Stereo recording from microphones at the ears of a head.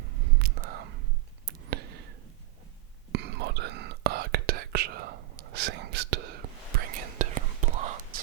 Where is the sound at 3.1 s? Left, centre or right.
Right.